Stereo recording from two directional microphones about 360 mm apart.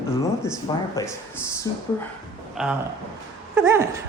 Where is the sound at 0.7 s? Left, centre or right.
Centre.